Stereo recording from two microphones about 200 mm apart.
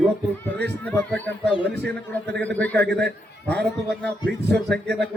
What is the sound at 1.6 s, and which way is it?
Speech, 55° right (ahead or behind).